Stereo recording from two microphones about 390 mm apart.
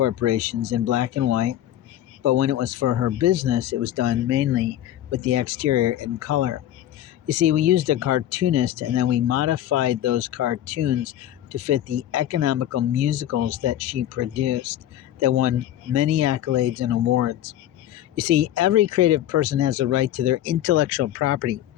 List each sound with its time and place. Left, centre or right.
0.0 s speech: right